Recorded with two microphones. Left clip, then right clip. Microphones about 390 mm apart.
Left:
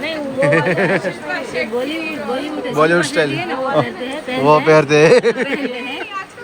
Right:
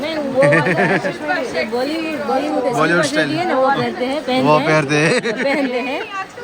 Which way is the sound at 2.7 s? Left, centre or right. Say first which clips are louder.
Left 4 dB; centre.